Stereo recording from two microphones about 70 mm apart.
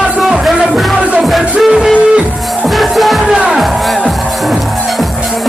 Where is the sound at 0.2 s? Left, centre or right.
Centre.